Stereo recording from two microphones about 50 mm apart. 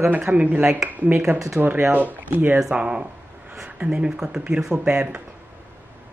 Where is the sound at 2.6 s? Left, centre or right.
Centre.